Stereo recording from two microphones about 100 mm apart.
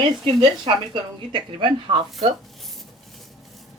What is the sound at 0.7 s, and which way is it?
A woman's voice, 55° right (ahead or behind).